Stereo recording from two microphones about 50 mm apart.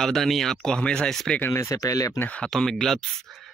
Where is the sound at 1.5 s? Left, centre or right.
Left.